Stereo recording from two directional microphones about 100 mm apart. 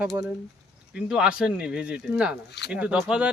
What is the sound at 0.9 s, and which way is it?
Speech, 10° right (ahead or behind).